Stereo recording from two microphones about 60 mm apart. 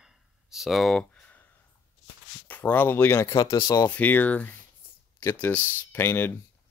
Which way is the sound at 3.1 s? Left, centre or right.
Left.